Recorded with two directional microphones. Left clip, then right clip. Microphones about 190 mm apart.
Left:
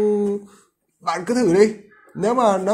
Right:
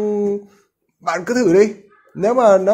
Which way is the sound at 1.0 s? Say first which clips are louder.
Right 3 dB; 45° right (ahead or behind).